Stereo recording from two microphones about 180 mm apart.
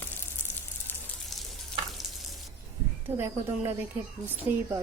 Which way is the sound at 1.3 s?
Centre (ahead or behind).